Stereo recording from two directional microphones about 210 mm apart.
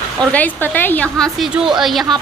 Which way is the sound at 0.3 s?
10° left (ahead or behind).